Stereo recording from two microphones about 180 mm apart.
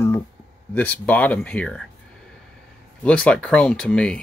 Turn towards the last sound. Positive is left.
turn(degrees=5)  # may be behind; listen again after turning